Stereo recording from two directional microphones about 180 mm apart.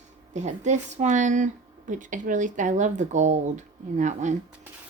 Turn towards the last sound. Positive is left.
turn(degrees=-40)  # may be behind; listen again after turning